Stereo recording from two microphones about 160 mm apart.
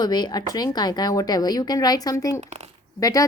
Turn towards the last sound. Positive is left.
turn(degrees=20)  # may be behind; listen again after turning